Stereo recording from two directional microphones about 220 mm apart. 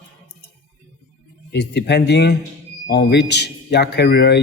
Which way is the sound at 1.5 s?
50° left (ahead or behind).